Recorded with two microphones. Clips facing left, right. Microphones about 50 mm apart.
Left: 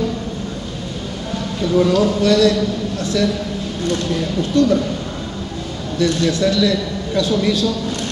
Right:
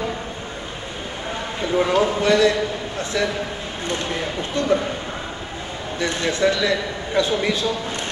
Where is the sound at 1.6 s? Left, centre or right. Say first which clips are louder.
Left 4 dB; right.